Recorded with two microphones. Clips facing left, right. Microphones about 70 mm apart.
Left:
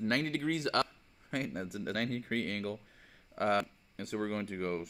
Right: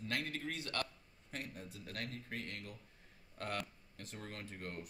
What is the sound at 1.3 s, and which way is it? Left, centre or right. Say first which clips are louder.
Speech: left 11 dB; left.